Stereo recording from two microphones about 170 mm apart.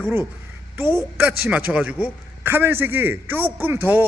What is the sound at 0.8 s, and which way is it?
A man's voice, 15° right (ahead or behind).